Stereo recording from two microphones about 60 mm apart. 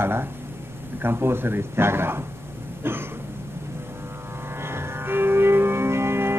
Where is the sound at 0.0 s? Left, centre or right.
Right.